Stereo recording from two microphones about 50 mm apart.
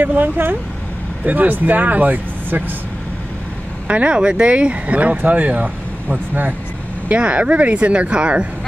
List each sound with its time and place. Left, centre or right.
0.0 s speech: right
3.8 s speech: right